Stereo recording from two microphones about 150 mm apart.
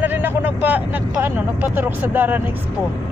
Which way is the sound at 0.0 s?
15° right (ahead or behind).